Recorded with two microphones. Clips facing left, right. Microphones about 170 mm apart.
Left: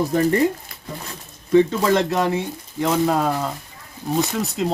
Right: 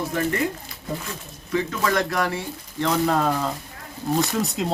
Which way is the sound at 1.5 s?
30° left (ahead or behind).